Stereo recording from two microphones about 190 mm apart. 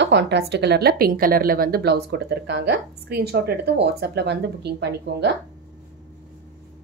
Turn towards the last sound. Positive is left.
turn(degrees=-65)  # may be behind; listen again after turning